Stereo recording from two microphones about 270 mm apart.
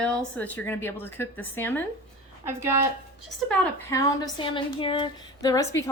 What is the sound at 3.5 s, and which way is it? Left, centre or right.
A woman's voice, centre.